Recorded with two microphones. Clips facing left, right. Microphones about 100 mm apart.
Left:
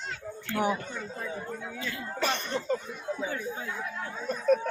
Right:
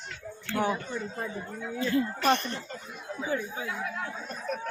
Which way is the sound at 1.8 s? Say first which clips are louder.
Right 16 dB; 35° right (ahead or behind).